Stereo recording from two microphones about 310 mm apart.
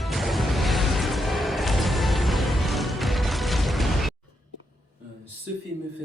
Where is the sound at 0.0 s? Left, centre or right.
Centre.